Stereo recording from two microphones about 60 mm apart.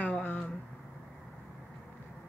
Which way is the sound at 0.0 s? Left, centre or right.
Left.